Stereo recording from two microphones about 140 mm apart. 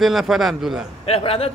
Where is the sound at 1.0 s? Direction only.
45° left (ahead or behind).